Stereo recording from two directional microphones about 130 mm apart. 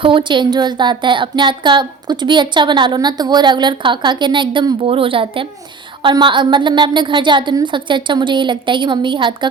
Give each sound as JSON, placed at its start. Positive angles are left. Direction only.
{"t": 0.0, "sound": "speech", "side_deg": -40}